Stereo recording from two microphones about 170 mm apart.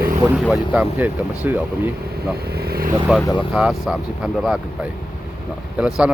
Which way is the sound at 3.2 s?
20° left (ahead or behind).